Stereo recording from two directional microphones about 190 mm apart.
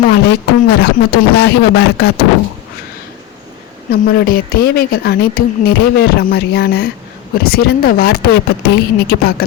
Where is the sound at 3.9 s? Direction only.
50° left (ahead or behind).